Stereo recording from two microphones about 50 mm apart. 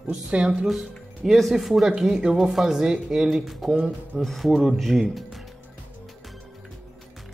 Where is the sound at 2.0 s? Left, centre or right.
Centre.